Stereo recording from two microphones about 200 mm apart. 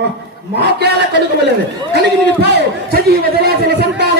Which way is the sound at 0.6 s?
55° right (ahead or behind).